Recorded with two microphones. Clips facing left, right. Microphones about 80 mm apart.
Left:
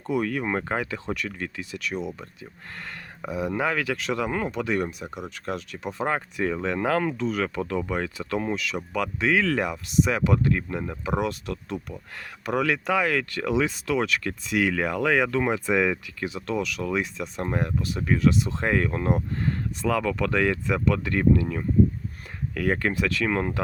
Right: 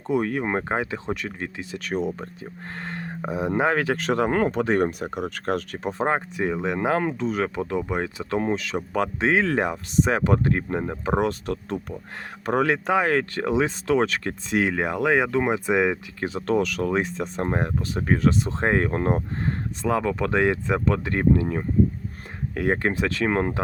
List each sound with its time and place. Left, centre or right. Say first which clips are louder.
0.1 s speech: right 2 dB; right
1.8 s speech: right 5 dB; right
4.9 s speech: right 6 dB; right
5.9 s speech: right 3 dB; right
16.2 s speech: right 5 dB; right